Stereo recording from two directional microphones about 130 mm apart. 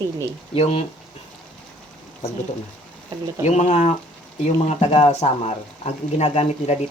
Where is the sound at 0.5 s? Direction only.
50° left (ahead or behind).